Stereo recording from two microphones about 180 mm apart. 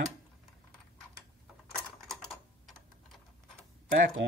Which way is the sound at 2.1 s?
Centre (ahead or behind).